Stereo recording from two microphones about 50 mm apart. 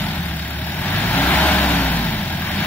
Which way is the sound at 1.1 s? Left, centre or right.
Left.